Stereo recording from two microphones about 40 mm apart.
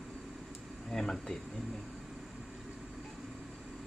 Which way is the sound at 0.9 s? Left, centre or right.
Centre.